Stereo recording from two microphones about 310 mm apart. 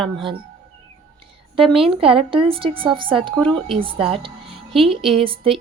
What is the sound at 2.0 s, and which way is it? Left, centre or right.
A woman's voice, centre.